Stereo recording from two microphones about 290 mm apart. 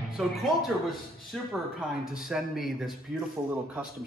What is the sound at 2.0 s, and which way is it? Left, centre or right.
Speech, centre.